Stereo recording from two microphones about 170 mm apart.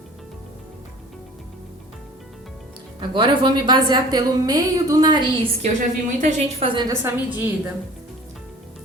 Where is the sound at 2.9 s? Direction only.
30° right (ahead or behind).